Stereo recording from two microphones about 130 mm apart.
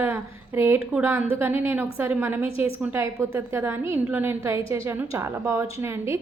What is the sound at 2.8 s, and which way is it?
A woman's voice, 20° right (ahead or behind).